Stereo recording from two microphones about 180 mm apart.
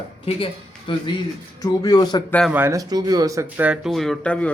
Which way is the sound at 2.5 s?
10° right (ahead or behind).